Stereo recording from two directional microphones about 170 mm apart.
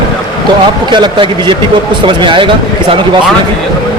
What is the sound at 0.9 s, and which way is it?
A man's voice, 25° right (ahead or behind).